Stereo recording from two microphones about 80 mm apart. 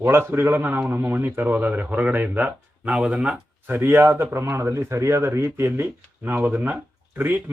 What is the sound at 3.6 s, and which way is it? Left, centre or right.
Speech, right.